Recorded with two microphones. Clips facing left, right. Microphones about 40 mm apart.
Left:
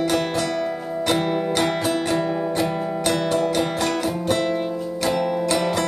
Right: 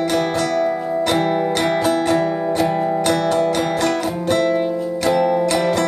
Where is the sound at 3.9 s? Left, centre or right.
Centre.